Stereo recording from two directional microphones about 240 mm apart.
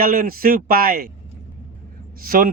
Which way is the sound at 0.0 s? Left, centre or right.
Right.